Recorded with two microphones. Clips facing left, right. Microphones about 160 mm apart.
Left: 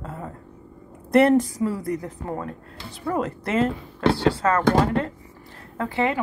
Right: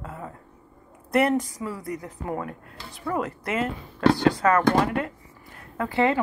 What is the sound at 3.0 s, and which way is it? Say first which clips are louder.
A woman's voice: left 2 dB; 25° left (ahead or behind).